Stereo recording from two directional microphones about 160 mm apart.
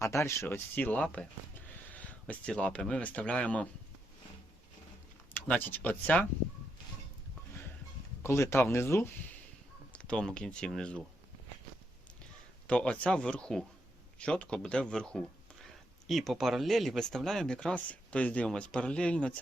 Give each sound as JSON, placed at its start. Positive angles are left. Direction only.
{"t": 0.0, "sound": "speech", "side_deg": 15}
{"t": 5.5, "sound": "speech", "side_deg": 10}
{"t": 8.2, "sound": "speech", "side_deg": 15}
{"t": 12.6, "sound": "speech", "side_deg": 5}